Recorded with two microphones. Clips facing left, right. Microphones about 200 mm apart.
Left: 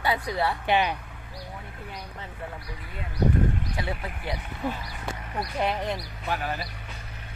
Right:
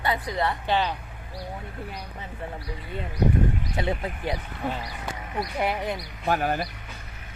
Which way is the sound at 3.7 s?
20° right (ahead or behind).